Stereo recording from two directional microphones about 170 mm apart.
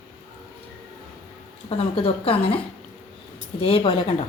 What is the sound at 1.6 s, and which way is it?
Speech, 35° left (ahead or behind).